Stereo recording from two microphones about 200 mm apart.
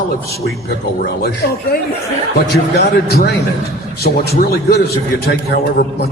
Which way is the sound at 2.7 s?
55° left (ahead or behind).